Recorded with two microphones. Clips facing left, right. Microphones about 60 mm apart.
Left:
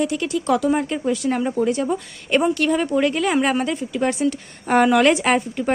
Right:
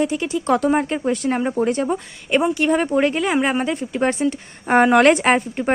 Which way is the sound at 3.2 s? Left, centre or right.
Centre.